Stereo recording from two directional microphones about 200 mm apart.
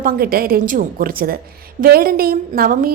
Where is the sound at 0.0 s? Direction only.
50° right (ahead or behind).